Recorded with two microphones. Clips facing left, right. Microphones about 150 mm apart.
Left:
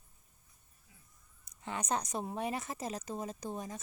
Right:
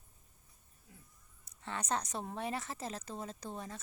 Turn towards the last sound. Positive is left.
turn(degrees=15)  # may be behind; listen again after turning